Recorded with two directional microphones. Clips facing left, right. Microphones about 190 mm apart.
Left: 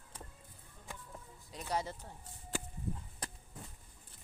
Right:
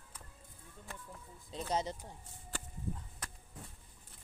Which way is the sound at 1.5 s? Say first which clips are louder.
Right 2 dB; 25° right (ahead or behind).